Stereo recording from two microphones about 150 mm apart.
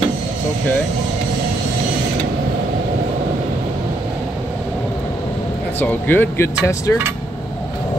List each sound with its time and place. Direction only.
5.8 s speech: 10° left (ahead or behind)